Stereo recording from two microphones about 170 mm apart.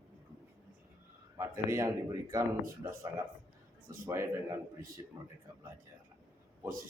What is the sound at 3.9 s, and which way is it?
Speech, 15° right (ahead or behind).